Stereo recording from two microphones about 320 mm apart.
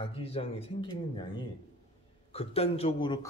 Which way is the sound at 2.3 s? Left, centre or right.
Centre.